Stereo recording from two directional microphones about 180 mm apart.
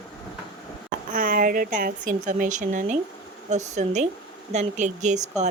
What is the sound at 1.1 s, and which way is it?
A woman's voice, 50° right (ahead or behind).